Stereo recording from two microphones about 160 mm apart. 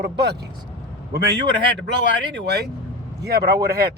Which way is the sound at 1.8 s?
90° right.